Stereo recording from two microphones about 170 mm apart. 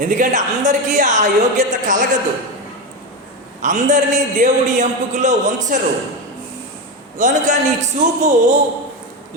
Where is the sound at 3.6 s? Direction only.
45° right (ahead or behind).